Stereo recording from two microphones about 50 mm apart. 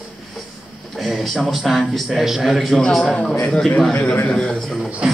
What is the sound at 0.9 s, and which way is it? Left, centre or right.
A man's voice, centre.